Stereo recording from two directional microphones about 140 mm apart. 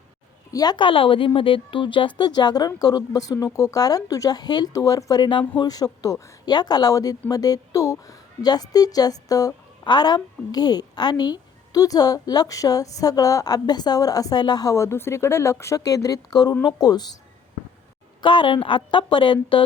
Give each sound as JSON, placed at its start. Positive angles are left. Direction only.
{"t": 0.5, "sound": "a woman's voice", "side_deg": 30}
{"t": 18.2, "sound": "speech", "side_deg": 35}